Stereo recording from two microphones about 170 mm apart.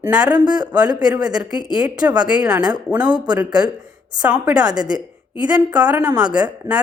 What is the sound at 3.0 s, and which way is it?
Speech, 25° right (ahead or behind).